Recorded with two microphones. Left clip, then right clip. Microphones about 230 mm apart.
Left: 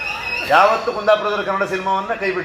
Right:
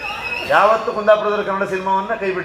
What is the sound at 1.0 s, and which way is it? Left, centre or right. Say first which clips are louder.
Speech: right 2 dB; left.